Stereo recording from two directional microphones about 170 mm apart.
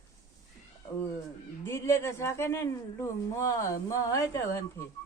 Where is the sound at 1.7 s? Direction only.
15° left (ahead or behind).